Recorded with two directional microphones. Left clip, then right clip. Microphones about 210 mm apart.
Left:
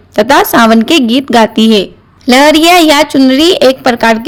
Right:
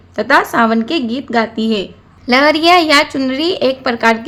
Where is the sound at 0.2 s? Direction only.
35° left (ahead or behind).